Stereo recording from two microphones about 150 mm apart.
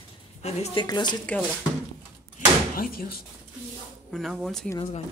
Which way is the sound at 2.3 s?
75° left (ahead or behind).